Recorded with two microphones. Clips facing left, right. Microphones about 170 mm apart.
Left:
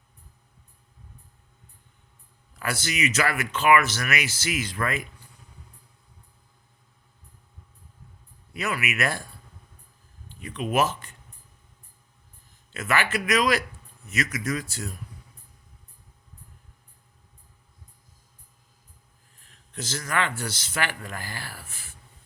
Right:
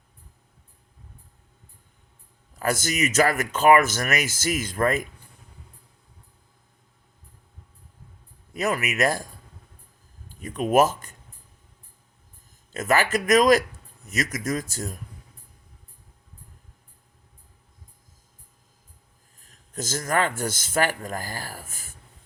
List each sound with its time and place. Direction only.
2.6 s speech: 45° right (ahead or behind)
8.5 s speech: 40° right (ahead or behind)
12.7 s speech: 40° right (ahead or behind)
19.4 s speech: 40° right (ahead or behind)